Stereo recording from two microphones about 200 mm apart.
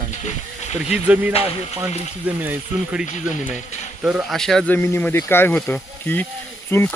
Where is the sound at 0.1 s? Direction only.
35° left (ahead or behind).